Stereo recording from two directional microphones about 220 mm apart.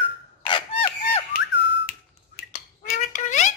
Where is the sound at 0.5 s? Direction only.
25° left (ahead or behind).